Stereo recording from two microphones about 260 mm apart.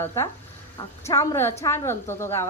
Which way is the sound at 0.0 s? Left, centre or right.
Centre.